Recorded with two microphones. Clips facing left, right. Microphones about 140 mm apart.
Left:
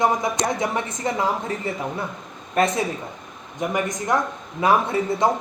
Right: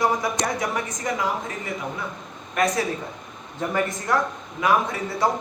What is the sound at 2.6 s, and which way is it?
Speech, 30° left (ahead or behind).